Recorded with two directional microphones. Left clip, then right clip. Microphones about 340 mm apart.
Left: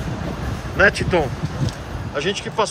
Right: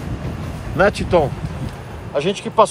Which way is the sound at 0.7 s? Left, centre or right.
Centre.